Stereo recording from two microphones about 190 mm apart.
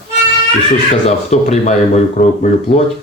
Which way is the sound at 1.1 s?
35° left (ahead or behind).